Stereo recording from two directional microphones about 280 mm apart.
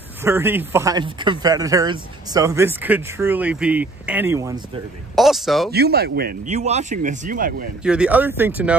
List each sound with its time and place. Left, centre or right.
0.2 s speech: centre
5.7 s speech: right
7.8 s speech: centre